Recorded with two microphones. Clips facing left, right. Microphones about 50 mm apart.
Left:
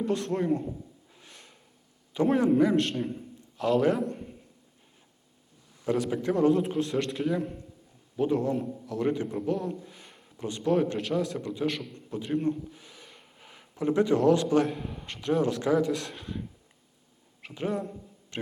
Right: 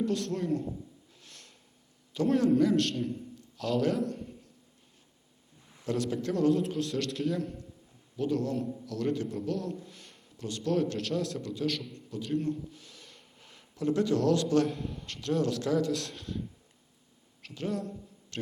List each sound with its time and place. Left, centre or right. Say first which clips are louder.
0.0 s a man's voice: left 3 dB; centre
1.2 s snort: left 3 dB; centre
2.1 s a man's voice: left 2 dB; left
3.1 s a sound: even; left
5.8 s a man's voice: left 4 dB; centre
8.1 s a man's voice: left 4 dB; left
11.9 s a sound: left 2 dB; left
14.5 s a man's voice: left 2 dB; centre
17.4 s speech: left 3 dB; left